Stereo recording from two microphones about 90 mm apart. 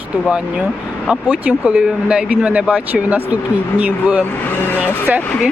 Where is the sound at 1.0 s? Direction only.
15° right (ahead or behind).